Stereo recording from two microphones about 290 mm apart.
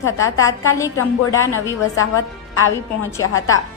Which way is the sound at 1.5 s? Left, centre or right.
Left.